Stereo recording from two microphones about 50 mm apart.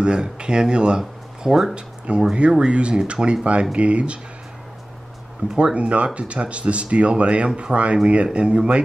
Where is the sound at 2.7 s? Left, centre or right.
Right.